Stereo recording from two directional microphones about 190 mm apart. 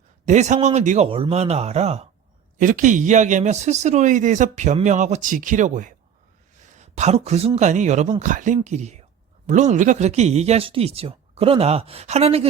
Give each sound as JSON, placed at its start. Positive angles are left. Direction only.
{"t": 0.3, "sound": "speech", "side_deg": -40}